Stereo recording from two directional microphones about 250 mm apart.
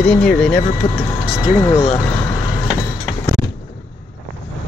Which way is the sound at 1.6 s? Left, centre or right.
Centre.